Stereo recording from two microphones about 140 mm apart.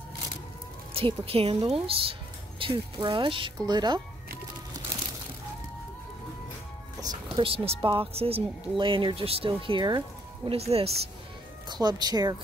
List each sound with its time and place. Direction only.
0.9 s a woman's voice: 45° right (ahead or behind)
2.6 s speech: 30° right (ahead or behind)
7.3 s speech: 40° right (ahead or behind)
10.6 s a woman's voice: 45° right (ahead or behind)
11.7 s speech: 30° right (ahead or behind)